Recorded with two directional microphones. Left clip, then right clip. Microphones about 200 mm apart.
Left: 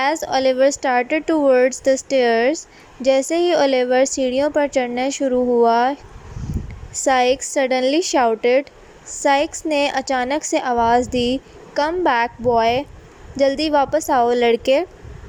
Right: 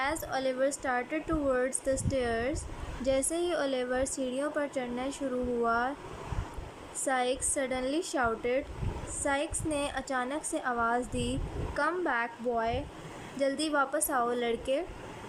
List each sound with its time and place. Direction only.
0.0 s a woman's voice: 30° left (ahead or behind)
7.0 s a woman's voice: 30° left (ahead or behind)